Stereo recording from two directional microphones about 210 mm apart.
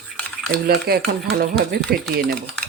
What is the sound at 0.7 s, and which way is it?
Speech, 45° right (ahead or behind).